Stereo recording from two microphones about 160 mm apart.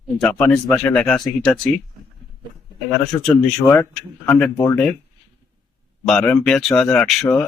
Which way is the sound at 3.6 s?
25° left (ahead or behind).